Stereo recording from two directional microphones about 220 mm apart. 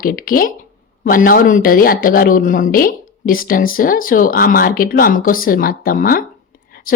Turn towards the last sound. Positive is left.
turn(degrees=40)  # may be behind; listen again after turning